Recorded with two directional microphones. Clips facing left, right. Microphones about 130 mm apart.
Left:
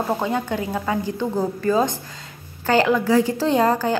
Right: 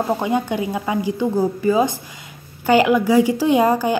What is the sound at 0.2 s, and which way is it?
Speech, 15° right (ahead or behind).